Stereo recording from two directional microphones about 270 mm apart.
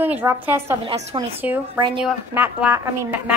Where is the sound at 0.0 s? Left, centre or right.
Centre.